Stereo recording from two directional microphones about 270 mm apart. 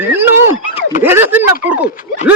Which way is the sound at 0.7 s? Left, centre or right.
Left.